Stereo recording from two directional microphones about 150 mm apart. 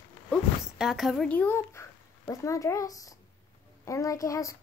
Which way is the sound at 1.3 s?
10° left (ahead or behind).